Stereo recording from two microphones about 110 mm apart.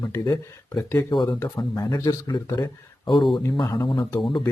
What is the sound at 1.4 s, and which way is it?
Speech, 30° left (ahead or behind).